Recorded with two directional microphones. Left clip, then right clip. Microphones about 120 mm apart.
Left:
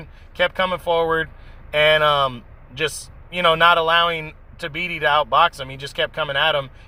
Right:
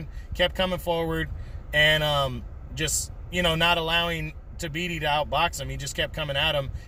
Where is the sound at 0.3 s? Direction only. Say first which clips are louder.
Left 5 dB; 20° right (ahead or behind).